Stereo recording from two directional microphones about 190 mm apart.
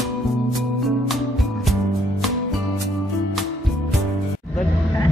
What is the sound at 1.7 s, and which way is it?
Music, centre (ahead or behind).